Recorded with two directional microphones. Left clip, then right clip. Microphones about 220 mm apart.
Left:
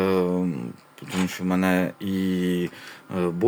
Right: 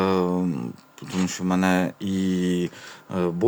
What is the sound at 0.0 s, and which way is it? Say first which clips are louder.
Speech: even; 10° right (ahead or behind).